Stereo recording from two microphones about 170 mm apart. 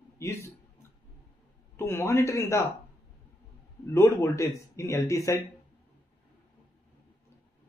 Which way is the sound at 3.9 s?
15° left (ahead or behind).